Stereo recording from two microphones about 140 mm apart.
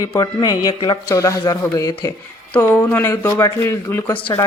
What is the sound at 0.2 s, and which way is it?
Speech, 25° left (ahead or behind).